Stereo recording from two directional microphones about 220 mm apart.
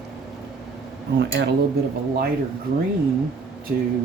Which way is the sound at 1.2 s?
50° right (ahead or behind).